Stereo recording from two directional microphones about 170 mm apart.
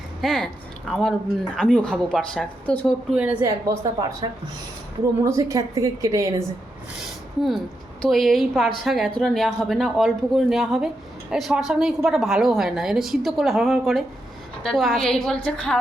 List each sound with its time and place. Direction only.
0.2 s a woman's voice: 5° left (ahead or behind)
3.2 s a woman's voice: 10° right (ahead or behind)
8.0 s a woman's voice: centre (ahead or behind)